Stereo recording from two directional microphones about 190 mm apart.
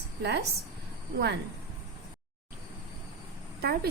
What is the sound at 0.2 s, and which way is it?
Speech, 60° right (ahead or behind).